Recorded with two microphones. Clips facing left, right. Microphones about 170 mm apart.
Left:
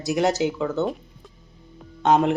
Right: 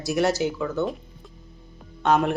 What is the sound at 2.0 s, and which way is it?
Speech, 20° left (ahead or behind).